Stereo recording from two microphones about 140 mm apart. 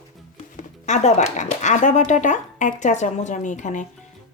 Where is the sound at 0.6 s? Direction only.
55° left (ahead or behind).